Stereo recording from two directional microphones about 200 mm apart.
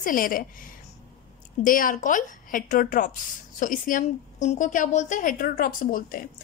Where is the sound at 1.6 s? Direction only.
45° left (ahead or behind).